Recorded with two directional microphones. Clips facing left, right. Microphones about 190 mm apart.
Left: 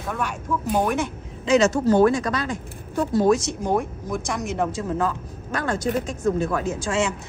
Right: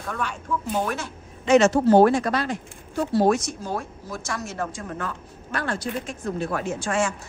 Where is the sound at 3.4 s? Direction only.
20° left (ahead or behind).